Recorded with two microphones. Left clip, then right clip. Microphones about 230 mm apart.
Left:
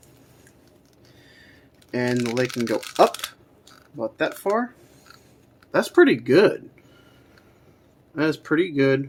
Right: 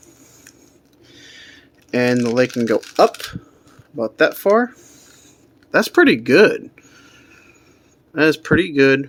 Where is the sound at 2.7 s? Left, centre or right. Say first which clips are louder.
Right 1 dB; right.